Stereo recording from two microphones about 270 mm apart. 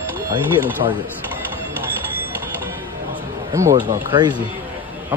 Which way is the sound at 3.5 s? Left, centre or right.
Centre.